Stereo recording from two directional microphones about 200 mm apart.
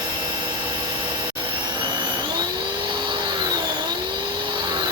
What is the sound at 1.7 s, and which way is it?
Vacuum cleaner, 25° right (ahead or behind).